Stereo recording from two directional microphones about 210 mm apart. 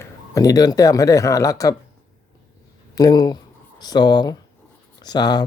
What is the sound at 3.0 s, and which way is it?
Speech, 20° left (ahead or behind).